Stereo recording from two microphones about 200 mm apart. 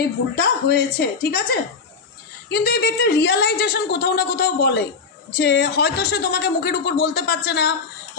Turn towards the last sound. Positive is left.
turn(degrees=55)  # may be behind; listen again after turning